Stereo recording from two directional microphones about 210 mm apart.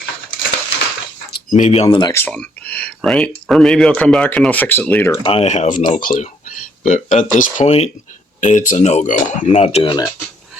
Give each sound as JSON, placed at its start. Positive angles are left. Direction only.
{"t": 1.3, "sound": "speech", "side_deg": 40}
{"t": 2.2, "sound": "speech", "side_deg": 5}
{"t": 5.2, "sound": "speech", "side_deg": 25}